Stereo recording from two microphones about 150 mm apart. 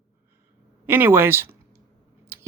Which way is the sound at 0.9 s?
15° right (ahead or behind).